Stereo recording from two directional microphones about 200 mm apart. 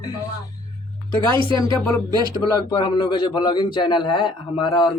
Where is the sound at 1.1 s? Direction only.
25° right (ahead or behind).